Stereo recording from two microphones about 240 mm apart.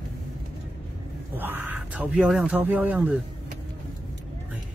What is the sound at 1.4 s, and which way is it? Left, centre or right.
Speech, centre.